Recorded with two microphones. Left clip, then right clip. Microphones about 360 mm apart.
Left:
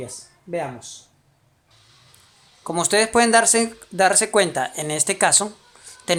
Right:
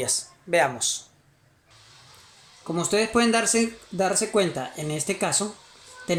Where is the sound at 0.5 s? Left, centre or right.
Right.